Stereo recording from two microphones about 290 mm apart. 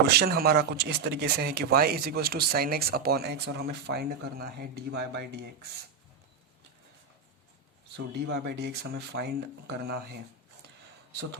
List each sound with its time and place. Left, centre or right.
0.2 s speech: right
7.9 s speech: right